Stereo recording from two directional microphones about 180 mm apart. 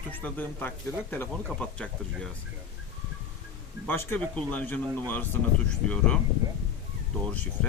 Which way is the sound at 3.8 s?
10° left (ahead or behind).